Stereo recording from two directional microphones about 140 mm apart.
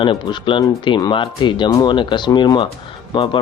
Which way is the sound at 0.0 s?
35° left (ahead or behind).